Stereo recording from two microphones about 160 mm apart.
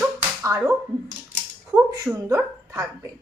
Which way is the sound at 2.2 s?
20° right (ahead or behind).